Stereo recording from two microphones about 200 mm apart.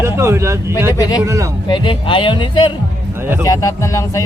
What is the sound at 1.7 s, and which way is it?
Speech, 25° left (ahead or behind).